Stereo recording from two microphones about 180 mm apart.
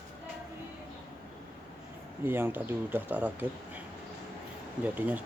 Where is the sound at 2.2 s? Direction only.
10° right (ahead or behind).